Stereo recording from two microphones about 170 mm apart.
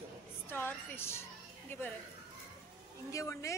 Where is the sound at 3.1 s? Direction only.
20° left (ahead or behind).